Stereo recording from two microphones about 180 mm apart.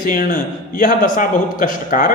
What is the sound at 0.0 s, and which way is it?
A man's voice, 50° left (ahead or behind).